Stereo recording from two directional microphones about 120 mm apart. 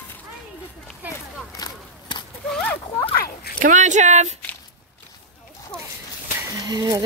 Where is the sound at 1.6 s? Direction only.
40° left (ahead or behind).